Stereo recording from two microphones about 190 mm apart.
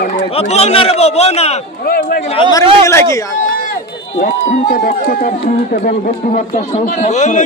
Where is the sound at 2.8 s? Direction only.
15° left (ahead or behind).